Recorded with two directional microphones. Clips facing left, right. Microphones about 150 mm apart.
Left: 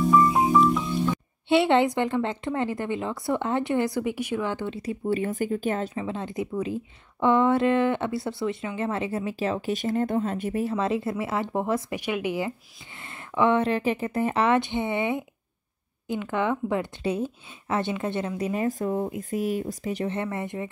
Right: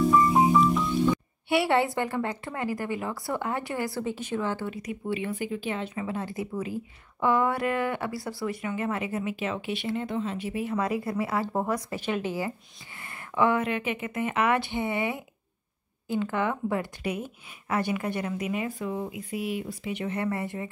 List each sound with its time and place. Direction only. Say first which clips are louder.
1.5 s speech: left 4 dB; 20° left (ahead or behind)
5.1 s speech: left 4 dB; 45° left (ahead or behind)
5.9 s speech: left 2 dB; 20° left (ahead or behind); by 10.7 s 45° left (ahead or behind)
10.7 s speech: left 2 dB; 25° left (ahead or behind)
18.5 s speech: left 5 dB; 40° left (ahead or behind)
20.2 s speech: even; 20° left (ahead or behind)